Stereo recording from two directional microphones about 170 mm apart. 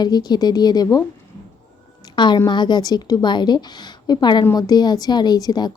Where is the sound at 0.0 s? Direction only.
25° left (ahead or behind).